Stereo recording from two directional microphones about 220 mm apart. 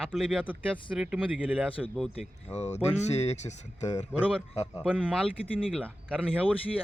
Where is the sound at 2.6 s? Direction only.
30° left (ahead or behind).